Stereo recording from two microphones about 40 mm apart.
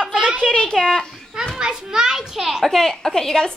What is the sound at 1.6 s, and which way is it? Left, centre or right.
A child's voice, centre.